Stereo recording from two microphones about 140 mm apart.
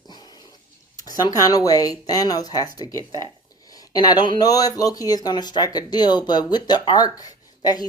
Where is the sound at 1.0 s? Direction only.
25° left (ahead or behind).